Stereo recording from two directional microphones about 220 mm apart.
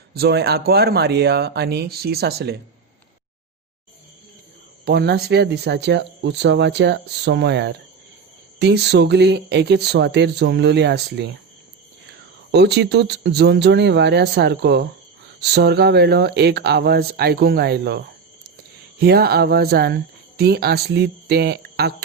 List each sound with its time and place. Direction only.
0.1 s speech: 45° right (ahead or behind)
4.9 s speech: 45° right (ahead or behind)
12.5 s speech: 50° right (ahead or behind)